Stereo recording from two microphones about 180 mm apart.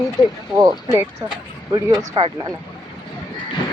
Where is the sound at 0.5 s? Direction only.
20° right (ahead or behind).